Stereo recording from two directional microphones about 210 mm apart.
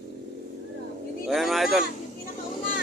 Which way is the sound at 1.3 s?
Centre (ahead or behind).